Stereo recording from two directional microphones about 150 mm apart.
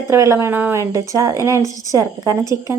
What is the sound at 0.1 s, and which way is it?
Speech, 20° right (ahead or behind).